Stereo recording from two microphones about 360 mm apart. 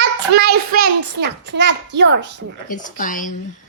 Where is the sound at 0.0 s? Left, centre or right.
Right.